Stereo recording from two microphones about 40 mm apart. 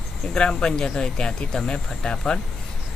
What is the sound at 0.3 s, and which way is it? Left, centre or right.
Speech, left.